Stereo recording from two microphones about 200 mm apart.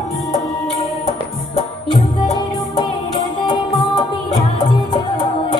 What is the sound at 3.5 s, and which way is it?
Music, 25° left (ahead or behind).